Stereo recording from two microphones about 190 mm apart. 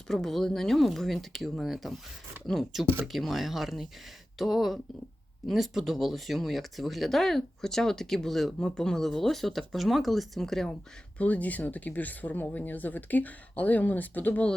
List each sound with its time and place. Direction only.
0.1 s speech: centre (ahead or behind)